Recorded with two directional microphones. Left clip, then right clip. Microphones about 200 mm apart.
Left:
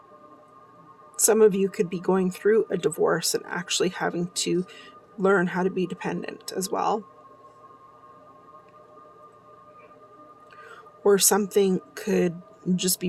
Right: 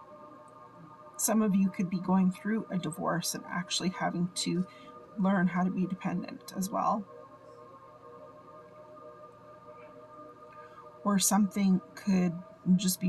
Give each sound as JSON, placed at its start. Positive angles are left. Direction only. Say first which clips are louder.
{"t": 1.1, "sound": "speech", "louder": "left 12 dB", "side_deg": 60}
{"t": 11.0, "sound": "speech", "louder": "left 9 dB", "side_deg": 60}